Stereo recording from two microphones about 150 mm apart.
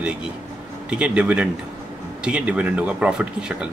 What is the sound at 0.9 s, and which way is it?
Speech, 5° right (ahead or behind).